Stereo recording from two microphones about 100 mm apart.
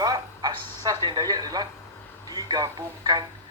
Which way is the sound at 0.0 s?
40° right (ahead or behind).